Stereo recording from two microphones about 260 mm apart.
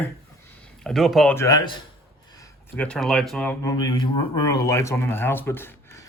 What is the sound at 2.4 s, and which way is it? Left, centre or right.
Speech, centre.